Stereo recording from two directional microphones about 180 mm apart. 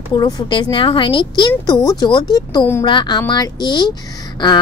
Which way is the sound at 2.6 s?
15° left (ahead or behind).